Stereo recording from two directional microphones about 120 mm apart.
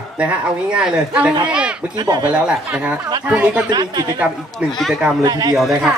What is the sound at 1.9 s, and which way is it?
Speech, 35° right (ahead or behind).